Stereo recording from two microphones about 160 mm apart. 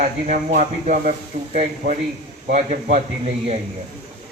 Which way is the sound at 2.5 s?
50° right (ahead or behind).